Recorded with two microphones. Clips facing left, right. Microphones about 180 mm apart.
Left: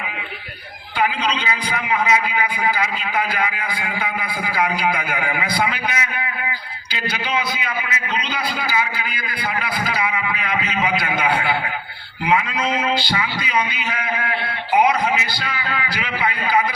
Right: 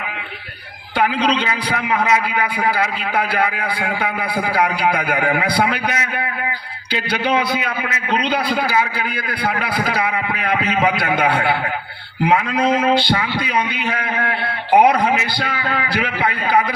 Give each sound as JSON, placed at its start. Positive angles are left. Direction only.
{"t": 0.9, "sound": "a man's voice", "side_deg": -65}